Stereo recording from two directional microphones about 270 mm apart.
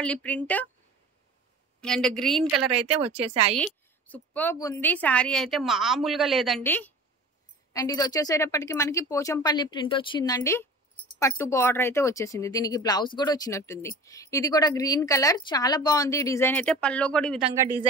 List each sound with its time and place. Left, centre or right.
0.0 s a woman's voice: centre
1.8 s a woman's voice: centre
2.7 s a woman's voice: right
3.5 s a woman's voice: centre